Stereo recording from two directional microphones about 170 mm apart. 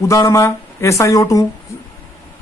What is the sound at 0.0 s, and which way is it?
Speech, 20° left (ahead or behind).